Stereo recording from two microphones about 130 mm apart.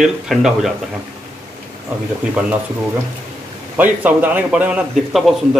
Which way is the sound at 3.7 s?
10° right (ahead or behind).